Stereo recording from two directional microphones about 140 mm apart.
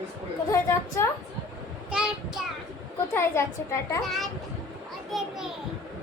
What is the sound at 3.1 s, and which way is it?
Speech, 20° left (ahead or behind).